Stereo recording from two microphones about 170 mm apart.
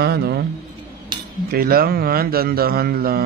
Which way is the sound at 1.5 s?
60° right (ahead or behind).